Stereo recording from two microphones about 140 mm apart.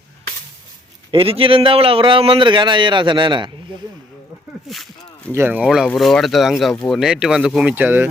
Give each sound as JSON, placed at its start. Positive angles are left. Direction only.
{"t": 1.1, "sound": "a man's voice", "side_deg": -40}
{"t": 4.7, "sound": "speech", "side_deg": 0}
{"t": 5.3, "sound": "speech", "side_deg": -15}
{"t": 5.6, "sound": "speech", "side_deg": -5}